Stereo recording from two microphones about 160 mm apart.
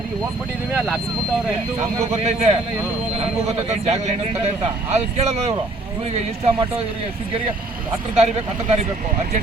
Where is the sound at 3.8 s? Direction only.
40° right (ahead or behind).